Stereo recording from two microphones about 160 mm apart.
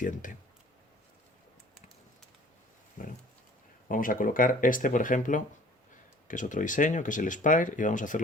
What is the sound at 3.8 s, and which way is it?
Speech, 60° left (ahead or behind).